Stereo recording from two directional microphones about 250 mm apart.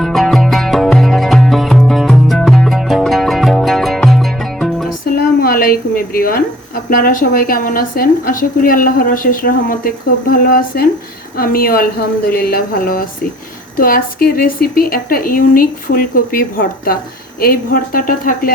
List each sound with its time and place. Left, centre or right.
0.0 s music: centre
5.4 s a sound: left
6.9 s a woman's voice: left